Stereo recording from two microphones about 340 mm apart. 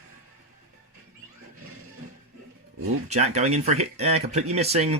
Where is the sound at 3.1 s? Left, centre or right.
Centre.